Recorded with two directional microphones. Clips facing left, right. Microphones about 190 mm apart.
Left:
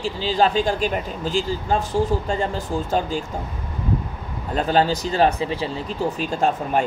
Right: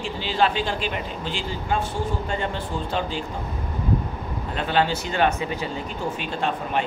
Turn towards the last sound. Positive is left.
turn(degrees=45)  # may be behind; listen again after turning